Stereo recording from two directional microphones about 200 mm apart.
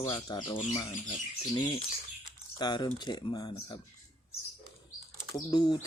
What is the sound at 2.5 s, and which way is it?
Speech, 20° left (ahead or behind).